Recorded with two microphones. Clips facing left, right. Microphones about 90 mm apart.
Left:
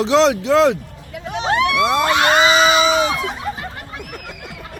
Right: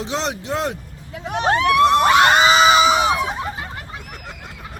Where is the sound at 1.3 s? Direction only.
50° right (ahead or behind).